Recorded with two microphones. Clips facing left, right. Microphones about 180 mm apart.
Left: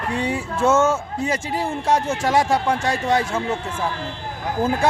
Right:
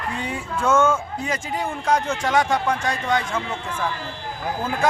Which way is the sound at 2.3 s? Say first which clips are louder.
Left 2 dB; 30° left (ahead or behind).